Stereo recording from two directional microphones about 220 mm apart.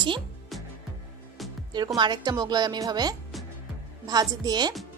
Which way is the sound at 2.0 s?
20° right (ahead or behind).